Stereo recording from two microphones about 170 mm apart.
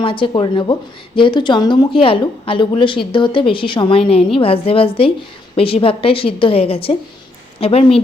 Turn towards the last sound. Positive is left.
turn(degrees=35)  # may be behind; listen again after turning